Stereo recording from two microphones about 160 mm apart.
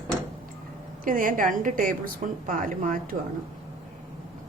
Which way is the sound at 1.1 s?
60° right (ahead or behind).